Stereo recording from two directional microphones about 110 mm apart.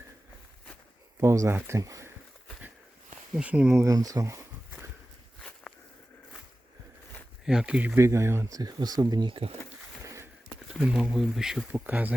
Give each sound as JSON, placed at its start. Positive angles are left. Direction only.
{"t": 1.2, "sound": "speech", "side_deg": -25}
{"t": 3.3, "sound": "speech", "side_deg": -10}
{"t": 3.7, "sound": "speech", "side_deg": -25}
{"t": 5.4, "sound": "walk", "side_deg": 5}
{"t": 7.4, "sound": "speech", "side_deg": -5}
{"t": 7.9, "sound": "speech", "side_deg": -25}
{"t": 9.3, "sound": "speech", "side_deg": -60}
{"t": 10.5, "sound": "speech", "side_deg": -5}